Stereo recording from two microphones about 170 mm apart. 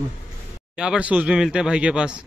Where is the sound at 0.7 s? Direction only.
5° right (ahead or behind).